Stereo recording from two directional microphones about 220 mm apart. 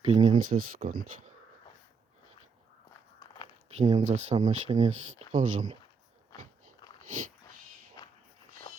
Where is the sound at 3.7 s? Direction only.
30° right (ahead or behind).